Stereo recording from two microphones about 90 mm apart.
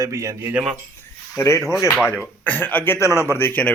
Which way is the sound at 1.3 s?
35° left (ahead or behind).